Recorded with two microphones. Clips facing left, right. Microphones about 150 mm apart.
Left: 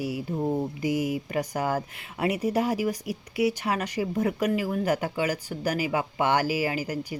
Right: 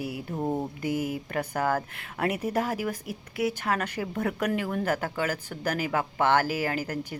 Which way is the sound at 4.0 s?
10° left (ahead or behind).